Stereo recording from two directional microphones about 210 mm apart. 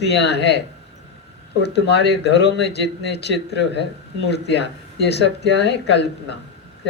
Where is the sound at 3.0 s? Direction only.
55° left (ahead or behind).